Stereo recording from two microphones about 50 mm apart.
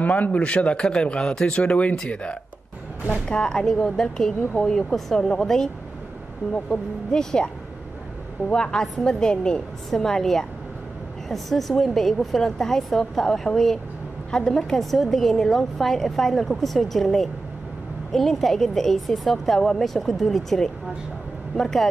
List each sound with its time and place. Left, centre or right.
0.0 s speech: left; by 1.6 s centre
1.6 s a woman's voice: left; by 5.7 s centre
7.1 s a woman's voice: centre